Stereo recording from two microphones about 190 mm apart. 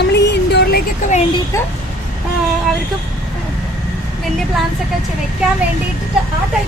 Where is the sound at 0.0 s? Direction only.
65° left (ahead or behind).